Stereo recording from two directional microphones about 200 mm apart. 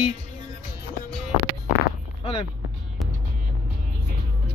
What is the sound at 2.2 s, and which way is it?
Speech, 30° left (ahead or behind).